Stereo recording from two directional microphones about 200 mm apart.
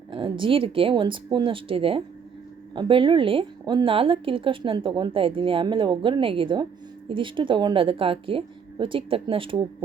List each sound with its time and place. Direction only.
0.1 s a woman's voice: 25° right (ahead or behind)